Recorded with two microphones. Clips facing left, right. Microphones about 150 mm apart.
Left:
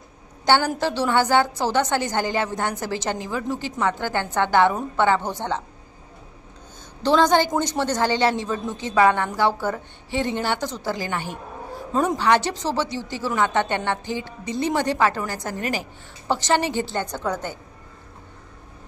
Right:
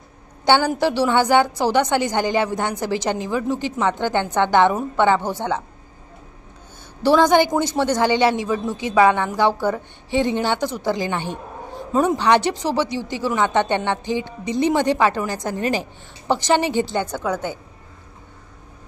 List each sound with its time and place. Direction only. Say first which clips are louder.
0.5 s a woman's voice: right 3 dB; 10° right (ahead or behind)
7.0 s a woman's voice: right 3 dB; 10° right (ahead or behind)